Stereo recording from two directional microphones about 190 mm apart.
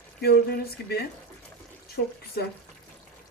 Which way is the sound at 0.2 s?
55° left (ahead or behind).